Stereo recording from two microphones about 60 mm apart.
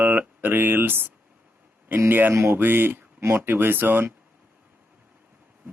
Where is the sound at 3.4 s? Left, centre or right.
Right.